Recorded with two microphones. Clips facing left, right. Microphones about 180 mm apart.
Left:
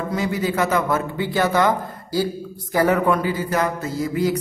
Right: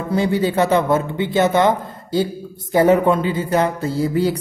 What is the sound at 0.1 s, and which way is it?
A man's voice, 30° right (ahead or behind).